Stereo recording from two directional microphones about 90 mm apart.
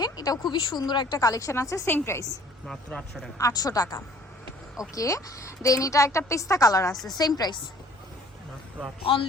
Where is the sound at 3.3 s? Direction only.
40° left (ahead or behind).